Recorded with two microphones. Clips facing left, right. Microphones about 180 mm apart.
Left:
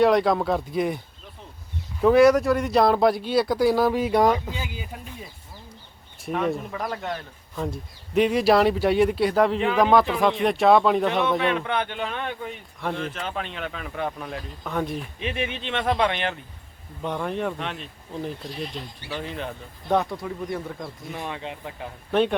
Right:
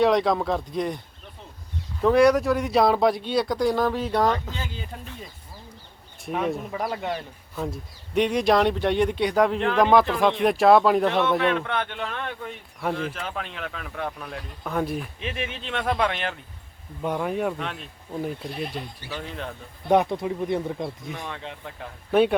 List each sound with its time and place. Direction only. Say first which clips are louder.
0.0 s speech: left 1 dB; centre (ahead or behind)
2.0 s speech: left 2 dB; 5° left (ahead or behind)
6.2 s speech: left 1 dB; centre (ahead or behind)
19.9 s speech: right 3 dB; 20° right (ahead or behind)
21.2 s speech: left 3 dB; 5° left (ahead or behind)
22.1 s a man's voice: right 2 dB; 5° right (ahead or behind)